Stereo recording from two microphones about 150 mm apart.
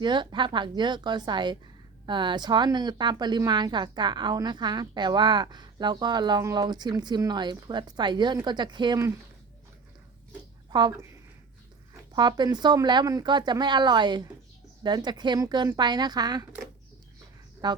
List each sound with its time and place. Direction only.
0.0 s speech: 30° right (ahead or behind)
10.7 s speech: 30° right (ahead or behind)
12.1 s speech: 30° right (ahead or behind)
17.6 s speech: 30° right (ahead or behind)